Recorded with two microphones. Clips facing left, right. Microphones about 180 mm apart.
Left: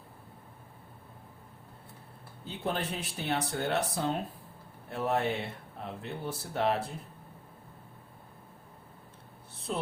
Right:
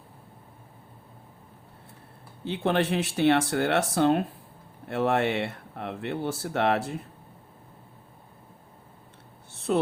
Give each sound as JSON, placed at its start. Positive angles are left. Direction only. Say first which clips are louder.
{"t": 2.4, "sound": "speech", "louder": "right 9 dB", "side_deg": -85}
{"t": 9.7, "sound": "a woman's voice", "louder": "right 10 dB", "side_deg": -75}